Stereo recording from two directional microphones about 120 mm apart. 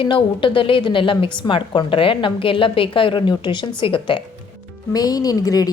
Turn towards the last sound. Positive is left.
turn(degrees=30)  # may be behind; listen again after turning